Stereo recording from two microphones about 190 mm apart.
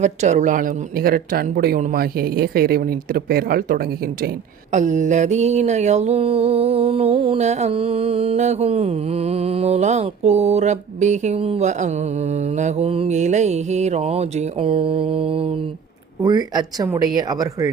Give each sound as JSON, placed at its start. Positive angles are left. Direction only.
{"t": 0.0, "sound": "speech", "side_deg": -40}
{"t": 4.7, "sound": "mantra", "side_deg": -40}
{"t": 16.2, "sound": "speech", "side_deg": -20}